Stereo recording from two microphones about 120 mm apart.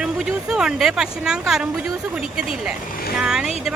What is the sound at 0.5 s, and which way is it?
A woman's voice, 5° right (ahead or behind).